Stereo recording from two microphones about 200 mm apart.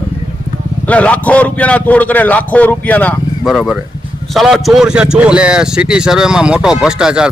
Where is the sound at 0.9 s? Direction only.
5° left (ahead or behind).